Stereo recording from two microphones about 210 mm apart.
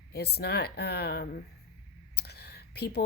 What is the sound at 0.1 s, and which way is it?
A woman's voice, 50° left (ahead or behind).